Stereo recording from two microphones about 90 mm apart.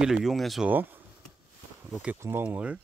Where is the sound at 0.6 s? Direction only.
20° right (ahead or behind).